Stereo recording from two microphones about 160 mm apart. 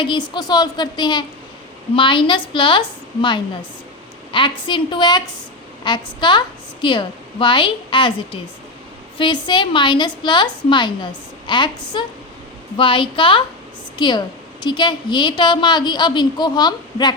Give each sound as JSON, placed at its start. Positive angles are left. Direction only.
{"t": 0.0, "sound": "a woman's voice", "side_deg": 30}